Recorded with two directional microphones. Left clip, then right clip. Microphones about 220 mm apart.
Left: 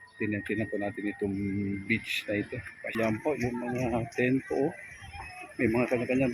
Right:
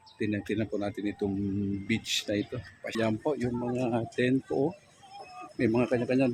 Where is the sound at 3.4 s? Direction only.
45° right (ahead or behind).